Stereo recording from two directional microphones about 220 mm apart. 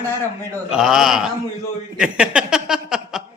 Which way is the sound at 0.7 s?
Centre (ahead or behind).